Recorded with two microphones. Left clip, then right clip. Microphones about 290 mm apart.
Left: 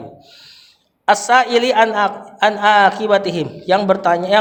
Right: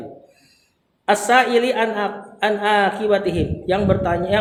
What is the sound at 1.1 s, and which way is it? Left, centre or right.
A man's voice, left.